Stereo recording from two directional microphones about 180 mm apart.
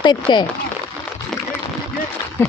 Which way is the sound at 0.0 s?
25° left (ahead or behind).